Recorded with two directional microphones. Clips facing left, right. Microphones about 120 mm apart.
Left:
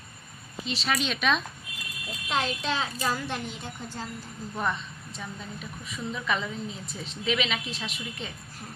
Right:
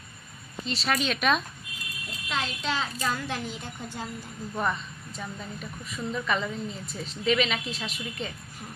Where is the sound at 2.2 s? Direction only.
25° left (ahead or behind).